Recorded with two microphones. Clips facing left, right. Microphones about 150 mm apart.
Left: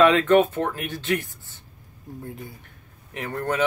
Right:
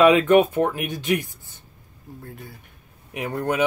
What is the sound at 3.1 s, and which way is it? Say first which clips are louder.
Speech: right 2 dB; 15° right (ahead or behind).